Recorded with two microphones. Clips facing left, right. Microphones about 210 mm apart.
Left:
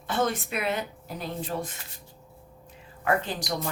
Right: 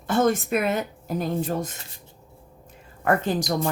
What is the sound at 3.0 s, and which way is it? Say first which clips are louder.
Speech: right 5 dB; 45° right (ahead or behind).